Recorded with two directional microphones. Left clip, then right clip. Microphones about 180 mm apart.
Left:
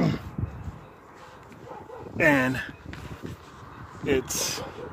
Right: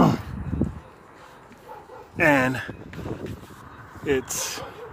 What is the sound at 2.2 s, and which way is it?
Speech, 15° right (ahead or behind).